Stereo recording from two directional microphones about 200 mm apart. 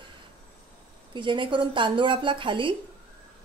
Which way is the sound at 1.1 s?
25° right (ahead or behind).